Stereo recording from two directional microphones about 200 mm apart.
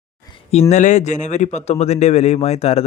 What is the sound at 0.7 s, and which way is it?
Speech, 35° left (ahead or behind).